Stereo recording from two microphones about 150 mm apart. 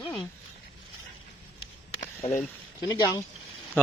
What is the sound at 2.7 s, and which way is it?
Speech, 30° left (ahead or behind).